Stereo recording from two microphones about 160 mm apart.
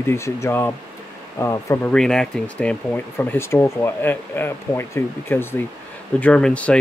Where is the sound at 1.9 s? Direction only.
5° left (ahead or behind).